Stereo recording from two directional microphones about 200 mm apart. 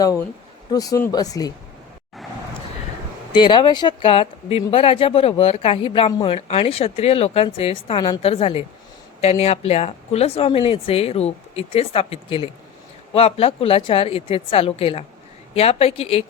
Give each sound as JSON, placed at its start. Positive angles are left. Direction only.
{"t": 0.7, "sound": "speech", "side_deg": 20}
{"t": 3.3, "sound": "a woman's voice", "side_deg": 25}